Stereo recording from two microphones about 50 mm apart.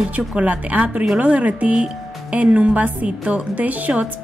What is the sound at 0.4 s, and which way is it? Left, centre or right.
A woman's voice, right.